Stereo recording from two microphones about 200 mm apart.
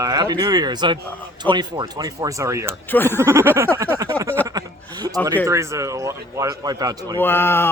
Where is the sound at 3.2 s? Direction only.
15° right (ahead or behind).